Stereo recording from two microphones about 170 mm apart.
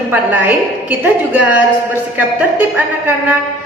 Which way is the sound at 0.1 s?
10° right (ahead or behind).